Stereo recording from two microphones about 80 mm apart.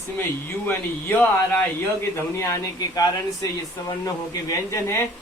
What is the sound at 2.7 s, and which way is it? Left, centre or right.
A man's voice, left.